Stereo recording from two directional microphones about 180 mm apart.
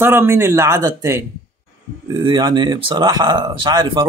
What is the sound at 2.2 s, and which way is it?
Speech, 25° right (ahead or behind).